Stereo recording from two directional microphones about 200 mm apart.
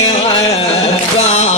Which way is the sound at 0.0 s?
30° left (ahead or behind).